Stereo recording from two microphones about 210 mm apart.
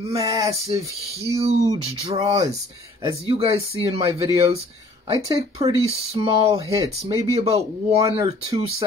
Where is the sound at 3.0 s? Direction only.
20° right (ahead or behind).